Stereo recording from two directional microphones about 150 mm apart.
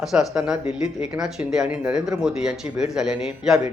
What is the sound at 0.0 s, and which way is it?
Speech, centre (ahead or behind).